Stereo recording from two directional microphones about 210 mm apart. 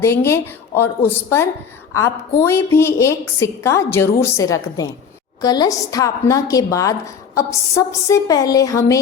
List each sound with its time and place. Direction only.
0.0 s a woman's voice: 10° left (ahead or behind)